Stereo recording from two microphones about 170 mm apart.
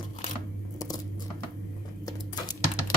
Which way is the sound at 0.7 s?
20° left (ahead or behind).